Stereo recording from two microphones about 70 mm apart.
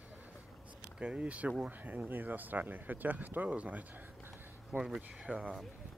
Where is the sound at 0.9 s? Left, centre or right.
Centre.